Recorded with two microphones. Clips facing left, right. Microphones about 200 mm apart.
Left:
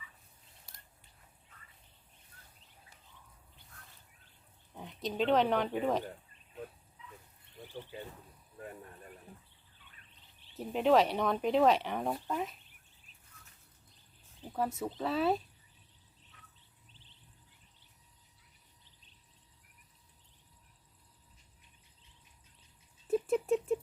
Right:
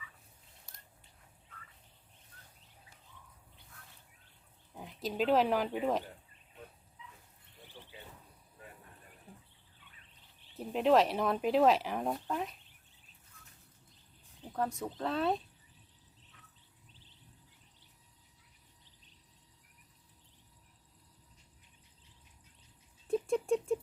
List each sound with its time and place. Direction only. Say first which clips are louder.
4.7 s speech: even; centre (ahead or behind)
7.8 s a sound: left 9 dB; 50° left (ahead or behind)
10.5 s speech: even; centre (ahead or behind)
14.4 s speech: left 1 dB; 5° left (ahead or behind)
23.0 s rodents: left 1 dB; 5° left (ahead or behind)